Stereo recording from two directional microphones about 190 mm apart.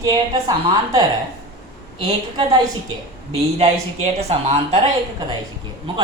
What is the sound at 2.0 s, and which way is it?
Speech, 20° right (ahead or behind).